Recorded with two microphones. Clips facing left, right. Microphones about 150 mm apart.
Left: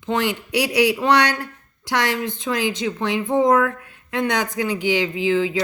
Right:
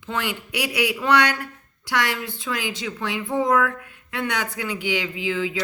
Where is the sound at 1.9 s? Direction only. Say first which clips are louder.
Left 3 dB; 20° left (ahead or behind).